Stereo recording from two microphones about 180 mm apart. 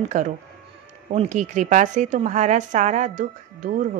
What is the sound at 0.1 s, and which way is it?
A woman's voice, 45° right (ahead or behind).